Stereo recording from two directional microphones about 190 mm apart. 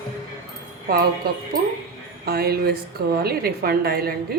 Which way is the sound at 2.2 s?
55° right (ahead or behind).